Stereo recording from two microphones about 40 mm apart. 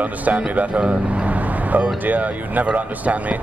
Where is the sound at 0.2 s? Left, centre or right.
Right.